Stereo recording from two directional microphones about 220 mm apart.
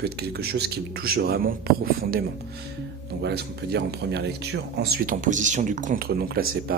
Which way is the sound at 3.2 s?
50° right (ahead or behind).